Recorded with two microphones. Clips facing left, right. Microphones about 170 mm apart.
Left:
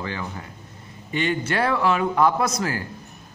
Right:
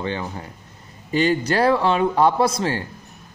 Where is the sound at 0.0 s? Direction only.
30° right (ahead or behind).